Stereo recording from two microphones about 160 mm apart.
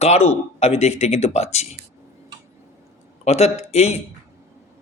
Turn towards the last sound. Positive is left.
turn(degrees=40)  # may be behind; listen again after turning